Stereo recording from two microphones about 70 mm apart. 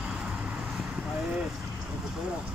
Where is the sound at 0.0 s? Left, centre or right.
Centre.